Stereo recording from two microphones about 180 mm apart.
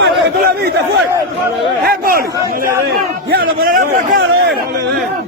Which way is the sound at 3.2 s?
55° right (ahead or behind).